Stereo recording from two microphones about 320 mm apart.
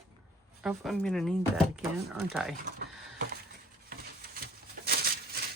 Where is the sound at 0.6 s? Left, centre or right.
Centre.